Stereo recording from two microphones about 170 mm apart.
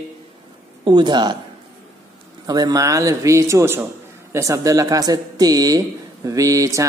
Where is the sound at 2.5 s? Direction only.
20° right (ahead or behind).